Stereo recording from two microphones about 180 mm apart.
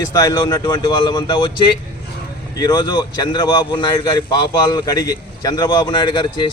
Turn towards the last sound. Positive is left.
turn(degrees=25)  # may be behind; listen again after turning